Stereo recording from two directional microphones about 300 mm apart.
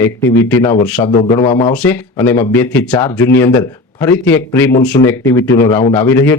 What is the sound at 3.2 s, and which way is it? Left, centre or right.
Speech, left.